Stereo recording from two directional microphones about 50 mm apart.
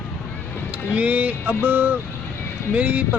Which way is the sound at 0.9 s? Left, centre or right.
Right.